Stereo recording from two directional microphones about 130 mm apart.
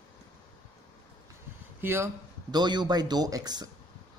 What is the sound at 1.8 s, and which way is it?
Speech, 15° right (ahead or behind).